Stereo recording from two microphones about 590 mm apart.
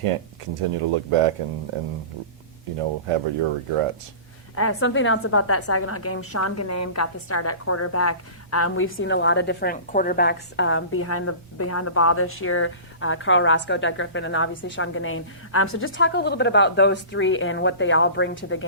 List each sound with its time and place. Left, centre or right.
0.7 s speech: right
3.1 s speech: right
4.5 s a woman's voice: left